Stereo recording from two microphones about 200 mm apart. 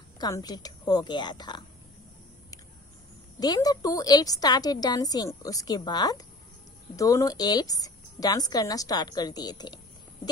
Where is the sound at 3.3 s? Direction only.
20° left (ahead or behind).